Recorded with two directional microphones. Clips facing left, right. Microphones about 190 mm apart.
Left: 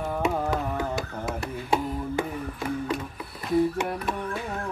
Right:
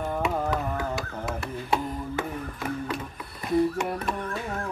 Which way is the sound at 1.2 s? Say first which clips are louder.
Left 1 dB; 15° left (ahead or behind).